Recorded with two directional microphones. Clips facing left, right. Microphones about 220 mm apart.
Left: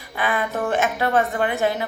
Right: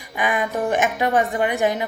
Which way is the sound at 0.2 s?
15° right (ahead or behind).